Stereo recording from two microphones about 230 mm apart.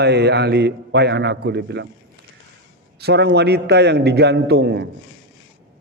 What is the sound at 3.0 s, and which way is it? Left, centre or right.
A man's voice, right.